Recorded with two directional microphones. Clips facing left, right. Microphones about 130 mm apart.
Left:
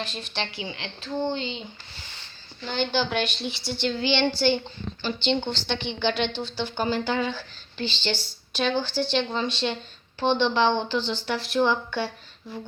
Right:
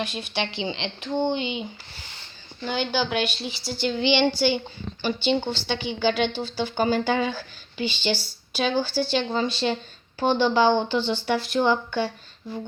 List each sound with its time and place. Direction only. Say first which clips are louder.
0.0 s a child's voice: right 4 dB; 10° right (ahead or behind)
0.5 s a woman's voice: right 6 dB; 25° right (ahead or behind)
2.6 s speech: right 1 dB; 10° right (ahead or behind)
3.9 s a child's voice: right 4 dB; 15° right (ahead or behind)